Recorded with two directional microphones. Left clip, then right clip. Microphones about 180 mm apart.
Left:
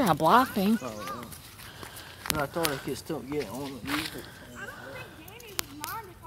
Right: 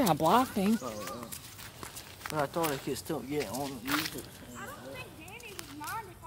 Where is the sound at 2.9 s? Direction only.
5° left (ahead or behind).